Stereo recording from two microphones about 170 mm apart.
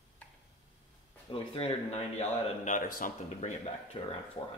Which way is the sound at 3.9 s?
35° left (ahead or behind).